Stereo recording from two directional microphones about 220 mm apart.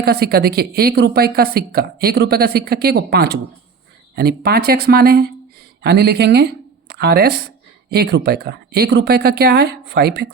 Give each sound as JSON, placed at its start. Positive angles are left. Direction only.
{"t": 0.0, "sound": "speech", "side_deg": -45}